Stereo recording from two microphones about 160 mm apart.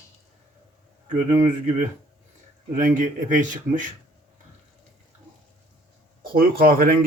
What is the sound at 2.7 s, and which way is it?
Speech, 55° right (ahead or behind).